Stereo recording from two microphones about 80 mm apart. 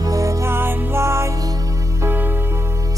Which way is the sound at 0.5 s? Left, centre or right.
Right.